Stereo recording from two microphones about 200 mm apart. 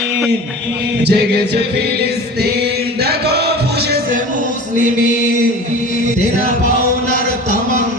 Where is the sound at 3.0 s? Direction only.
55° right (ahead or behind).